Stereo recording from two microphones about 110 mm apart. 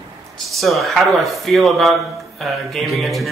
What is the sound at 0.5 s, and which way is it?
Speech, centre (ahead or behind).